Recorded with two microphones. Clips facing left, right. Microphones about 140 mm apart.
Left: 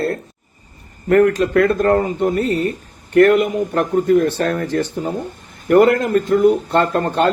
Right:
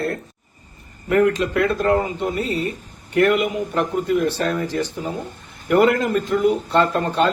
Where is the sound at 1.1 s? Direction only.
50° left (ahead or behind).